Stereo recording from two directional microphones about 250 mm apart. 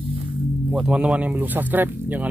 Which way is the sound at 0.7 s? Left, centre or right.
Centre.